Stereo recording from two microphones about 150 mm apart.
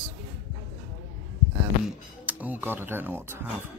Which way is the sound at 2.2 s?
10° right (ahead or behind).